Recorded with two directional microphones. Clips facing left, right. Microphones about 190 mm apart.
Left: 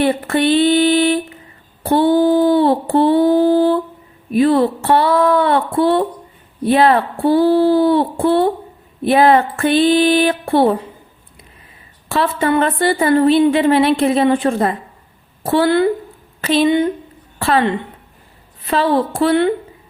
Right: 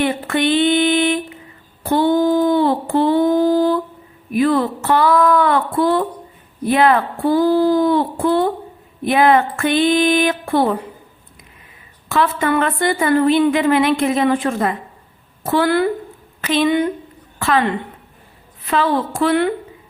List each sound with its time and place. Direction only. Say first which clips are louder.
0.0 s a sound: left 3 dB; 35° left (ahead or behind)
1.8 s a woman's voice: left 2 dB; 30° left (ahead or behind)
12.0 s a woman's voice: left 1 dB; 30° left (ahead or behind)